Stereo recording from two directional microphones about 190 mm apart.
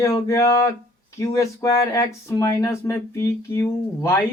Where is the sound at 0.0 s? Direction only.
15° left (ahead or behind).